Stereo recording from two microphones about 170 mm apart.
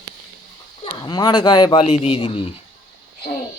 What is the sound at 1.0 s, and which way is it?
A man's voice, 25° left (ahead or behind).